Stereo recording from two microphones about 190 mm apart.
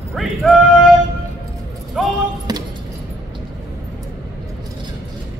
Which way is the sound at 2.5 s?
20° right (ahead or behind).